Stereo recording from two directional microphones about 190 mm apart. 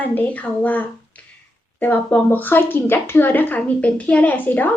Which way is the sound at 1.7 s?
10° left (ahead or behind).